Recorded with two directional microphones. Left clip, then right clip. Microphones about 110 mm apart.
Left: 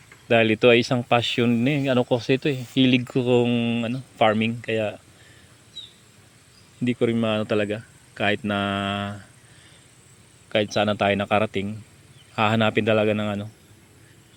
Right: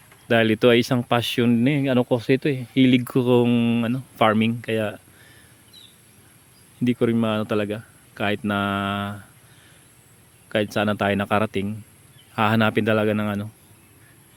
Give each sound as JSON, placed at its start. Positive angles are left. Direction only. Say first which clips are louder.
{"t": 0.3, "sound": "speech", "louder": "even", "side_deg": -60}
{"t": 6.8, "sound": "speech", "louder": "right 1 dB", "side_deg": -75}
{"t": 7.2, "sound": "speech", "louder": "even", "side_deg": -45}
{"t": 10.5, "sound": "speech", "louder": "left 1 dB", "side_deg": -55}